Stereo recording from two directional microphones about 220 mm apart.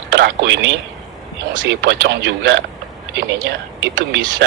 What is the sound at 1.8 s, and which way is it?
Speech, 50° right (ahead or behind).